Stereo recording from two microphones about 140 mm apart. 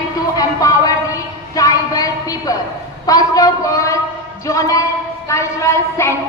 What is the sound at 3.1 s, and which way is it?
A man's voice, 25° left (ahead or behind).